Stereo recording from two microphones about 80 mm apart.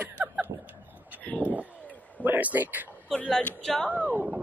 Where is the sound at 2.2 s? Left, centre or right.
Right.